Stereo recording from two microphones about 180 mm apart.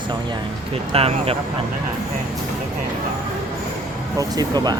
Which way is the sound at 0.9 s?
30° right (ahead or behind).